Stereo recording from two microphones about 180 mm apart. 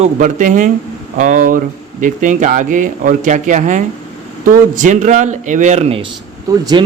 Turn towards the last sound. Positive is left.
turn(degrees=-25)  # may be behind; listen again after turning